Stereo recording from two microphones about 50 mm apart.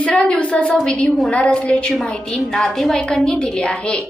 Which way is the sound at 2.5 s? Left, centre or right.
Centre.